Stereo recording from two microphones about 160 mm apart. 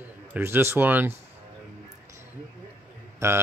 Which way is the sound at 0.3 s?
15° right (ahead or behind).